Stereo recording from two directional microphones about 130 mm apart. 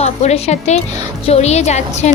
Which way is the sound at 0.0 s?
55° left (ahead or behind).